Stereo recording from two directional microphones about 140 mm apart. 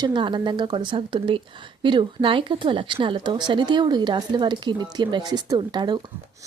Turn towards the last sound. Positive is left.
turn(degrees=-30)  # may be behind; listen again after turning